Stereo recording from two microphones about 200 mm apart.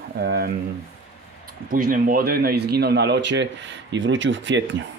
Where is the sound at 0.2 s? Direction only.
50° right (ahead or behind).